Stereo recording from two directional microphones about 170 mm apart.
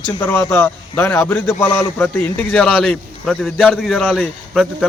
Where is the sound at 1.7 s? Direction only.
25° left (ahead or behind).